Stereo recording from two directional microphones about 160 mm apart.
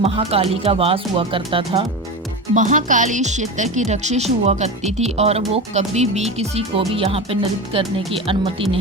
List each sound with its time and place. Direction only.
0.0 s speech: 40° right (ahead or behind)
2.6 s speech: 55° right (ahead or behind); by 8.4 s 35° right (ahead or behind)